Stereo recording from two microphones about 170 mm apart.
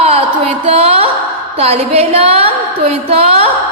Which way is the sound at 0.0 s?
35° right (ahead or behind).